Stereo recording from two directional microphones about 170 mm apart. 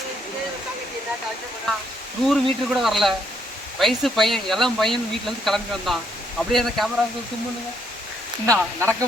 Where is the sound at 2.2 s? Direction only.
Centre (ahead or behind).